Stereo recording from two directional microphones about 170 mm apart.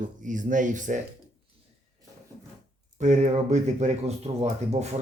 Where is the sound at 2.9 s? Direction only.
45° right (ahead or behind).